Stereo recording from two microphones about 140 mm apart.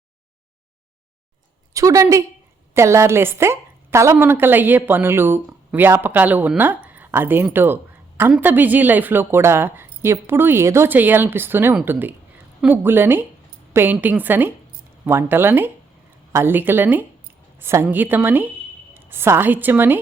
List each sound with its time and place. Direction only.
1.7 s a woman's voice: 25° right (ahead or behind)